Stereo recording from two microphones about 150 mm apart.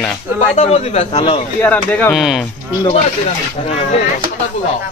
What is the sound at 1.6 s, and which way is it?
Speech, 10° left (ahead or behind).